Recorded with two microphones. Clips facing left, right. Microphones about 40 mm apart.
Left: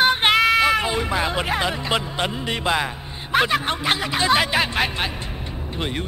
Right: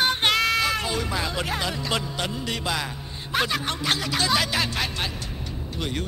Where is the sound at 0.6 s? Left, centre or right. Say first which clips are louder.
Left 6 dB; left.